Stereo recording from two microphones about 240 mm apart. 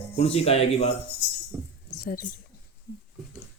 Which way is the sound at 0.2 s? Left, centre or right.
Left.